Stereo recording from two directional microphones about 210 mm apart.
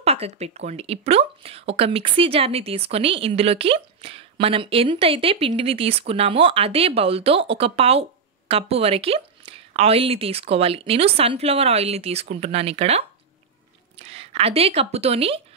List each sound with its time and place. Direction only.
0.0 s speech: 30° right (ahead or behind)